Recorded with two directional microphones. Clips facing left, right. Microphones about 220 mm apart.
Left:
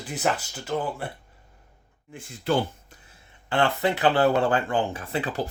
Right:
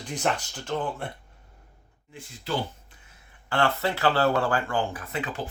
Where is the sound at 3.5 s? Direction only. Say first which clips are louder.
Left 2 dB; 20° left (ahead or behind).